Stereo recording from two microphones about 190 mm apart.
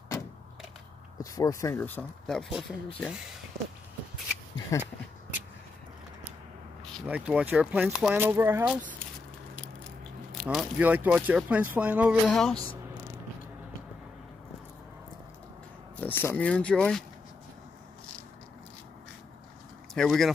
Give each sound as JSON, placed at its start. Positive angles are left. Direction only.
{"t": 1.1, "sound": "speech", "side_deg": 20}
{"t": 4.7, "sound": "speech", "side_deg": 15}
{"t": 7.1, "sound": "speech", "side_deg": -5}
{"t": 10.3, "sound": "speech", "side_deg": 0}
{"t": 12.3, "sound": "speech", "side_deg": 5}
{"t": 16.0, "sound": "speech", "side_deg": 10}
{"t": 19.9, "sound": "speech", "side_deg": 0}